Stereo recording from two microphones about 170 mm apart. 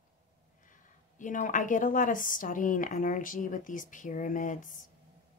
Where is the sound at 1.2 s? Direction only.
50° left (ahead or behind).